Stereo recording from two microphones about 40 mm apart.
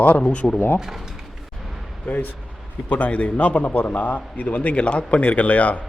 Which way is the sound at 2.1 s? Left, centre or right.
Left.